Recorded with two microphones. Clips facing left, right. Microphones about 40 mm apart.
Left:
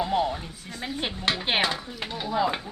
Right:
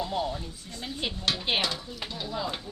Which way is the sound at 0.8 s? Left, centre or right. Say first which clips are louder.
Left 5 dB; centre.